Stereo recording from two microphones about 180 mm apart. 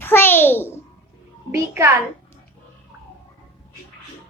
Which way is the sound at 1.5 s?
15° right (ahead or behind).